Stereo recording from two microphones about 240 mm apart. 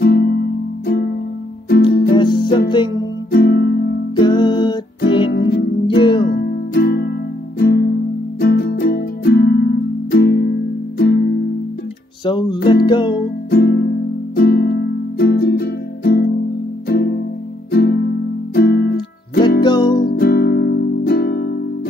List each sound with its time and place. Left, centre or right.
0.0 s music: left
2.1 s music: centre
3.3 s music: left
4.2 s music: centre
5.3 s music: left
5.9 s music: centre
6.2 s music: left
12.3 s music: left
13.5 s music: left
19.6 s music: centre
20.0 s music: left